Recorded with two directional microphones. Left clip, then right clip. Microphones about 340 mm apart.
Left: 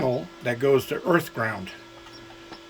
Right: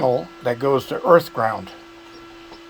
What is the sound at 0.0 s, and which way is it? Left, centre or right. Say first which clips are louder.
Speech: right 6 dB; centre.